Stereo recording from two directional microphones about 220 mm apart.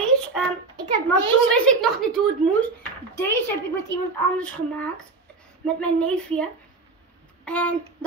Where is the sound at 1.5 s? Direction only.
5° left (ahead or behind).